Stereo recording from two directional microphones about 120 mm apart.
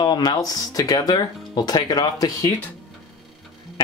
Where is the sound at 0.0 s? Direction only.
35° left (ahead or behind).